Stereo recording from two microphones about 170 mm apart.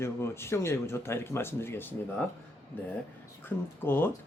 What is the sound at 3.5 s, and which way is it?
Speech, 10° left (ahead or behind).